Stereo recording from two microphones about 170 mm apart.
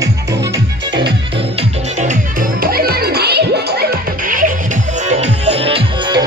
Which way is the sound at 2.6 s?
60° right (ahead or behind).